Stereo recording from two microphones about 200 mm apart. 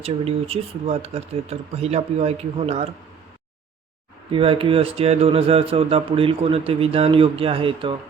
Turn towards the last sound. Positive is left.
turn(degrees=-25)  # may be behind; listen again after turning